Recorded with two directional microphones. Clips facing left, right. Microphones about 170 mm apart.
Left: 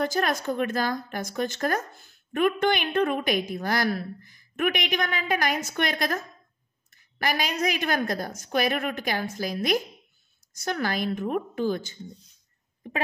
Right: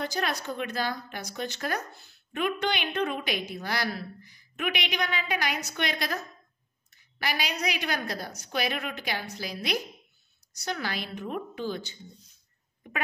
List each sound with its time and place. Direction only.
0.0 s speech: 50° left (ahead or behind)
12.8 s speech: 30° left (ahead or behind)